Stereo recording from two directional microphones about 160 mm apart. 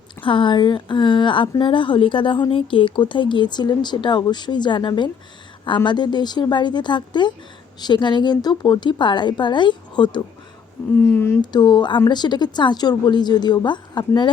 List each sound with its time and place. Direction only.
0.3 s a woman's voice: 30° left (ahead or behind)
10.9 s speech: 10° left (ahead or behind)
11.5 s a woman's voice: 25° left (ahead or behind)